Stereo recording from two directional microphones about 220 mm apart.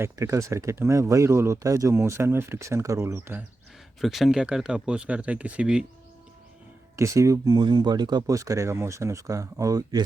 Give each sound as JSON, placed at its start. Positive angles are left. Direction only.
{"t": 0.0, "sound": "speech", "side_deg": -15}
{"t": 6.9, "sound": "speech", "side_deg": -15}